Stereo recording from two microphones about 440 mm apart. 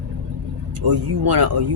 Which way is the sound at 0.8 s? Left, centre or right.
Right.